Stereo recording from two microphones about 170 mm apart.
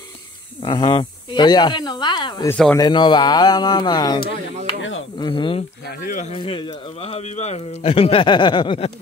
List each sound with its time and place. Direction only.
0.6 s speech: 30° left (ahead or behind)
2.5 s speech: 10° left (ahead or behind)
2.8 s speech: 25° left (ahead or behind)
5.9 s speech: 50° left (ahead or behind)
6.3 s speech: 30° left (ahead or behind)